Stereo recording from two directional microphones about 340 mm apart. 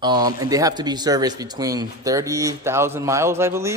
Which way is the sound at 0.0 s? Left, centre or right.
Centre.